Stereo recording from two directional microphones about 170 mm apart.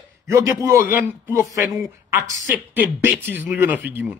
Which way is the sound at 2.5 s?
5° right (ahead or behind).